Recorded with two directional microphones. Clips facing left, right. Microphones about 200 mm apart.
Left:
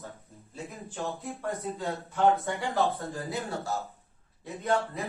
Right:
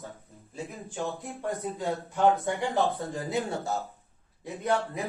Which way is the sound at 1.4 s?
15° right (ahead or behind).